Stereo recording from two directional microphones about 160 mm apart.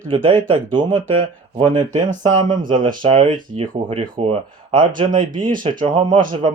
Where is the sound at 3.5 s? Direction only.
35° right (ahead or behind).